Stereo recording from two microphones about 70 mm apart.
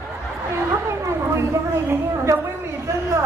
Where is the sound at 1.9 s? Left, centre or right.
Right.